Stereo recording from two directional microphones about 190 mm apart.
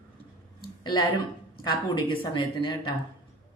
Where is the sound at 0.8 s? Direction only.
20° left (ahead or behind).